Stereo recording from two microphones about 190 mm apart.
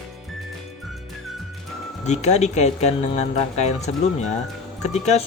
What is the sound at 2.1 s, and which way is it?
Speech, 35° left (ahead or behind).